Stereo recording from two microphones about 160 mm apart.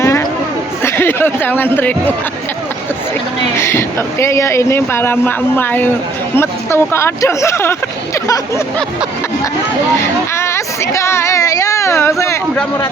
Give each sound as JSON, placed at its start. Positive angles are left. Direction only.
{"t": 0.0, "sound": "a sound", "side_deg": 15}
{"t": 0.9, "sound": "speech", "side_deg": 15}
{"t": 3.6, "sound": "speech", "side_deg": 15}
{"t": 10.3, "sound": "speech", "side_deg": 15}